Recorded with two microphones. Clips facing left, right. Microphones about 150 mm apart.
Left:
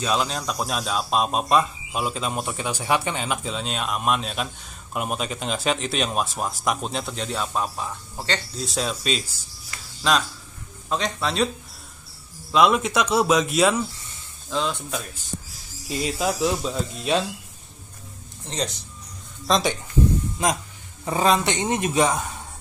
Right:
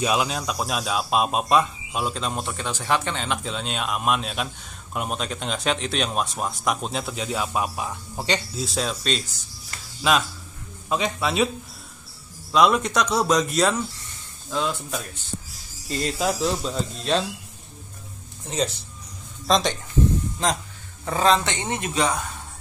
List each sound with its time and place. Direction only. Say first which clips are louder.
0.0 s speech: right 1 dB; 10° right (ahead or behind)
8.5 s speech: even; centre (ahead or behind)
12.5 s speech: even; centre (ahead or behind)
18.5 s speech: right 3 dB; 5° right (ahead or behind)
21.0 s speech: even; 15° left (ahead or behind)